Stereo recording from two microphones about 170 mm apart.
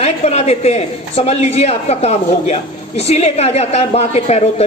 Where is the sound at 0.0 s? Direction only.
40° left (ahead or behind).